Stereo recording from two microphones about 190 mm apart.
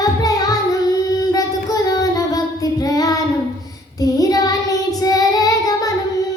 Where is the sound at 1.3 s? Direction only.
20° left (ahead or behind).